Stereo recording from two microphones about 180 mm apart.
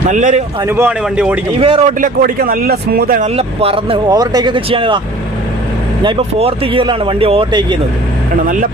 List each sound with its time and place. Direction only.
0.1 s speech: 45° right (ahead or behind)
0.6 s speech: 15° right (ahead or behind)
1.5 s speech: 30° right (ahead or behind)
2.0 s speech: 50° right (ahead or behind)
3.2 s speech: 35° right (ahead or behind)
6.0 s speech: 30° right (ahead or behind)